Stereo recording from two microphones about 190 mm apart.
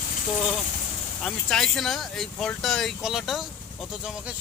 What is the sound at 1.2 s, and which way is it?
Speech, 5° left (ahead or behind).